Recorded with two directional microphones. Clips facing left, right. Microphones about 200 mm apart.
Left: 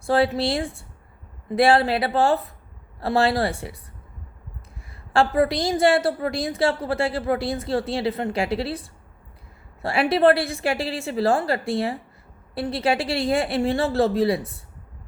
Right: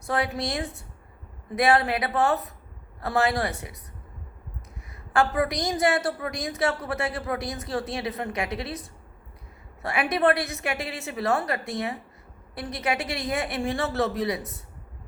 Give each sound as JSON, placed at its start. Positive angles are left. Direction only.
{"t": 0.0, "sound": "a woman's voice", "side_deg": 30}
{"t": 5.1, "sound": "a woman's voice", "side_deg": 30}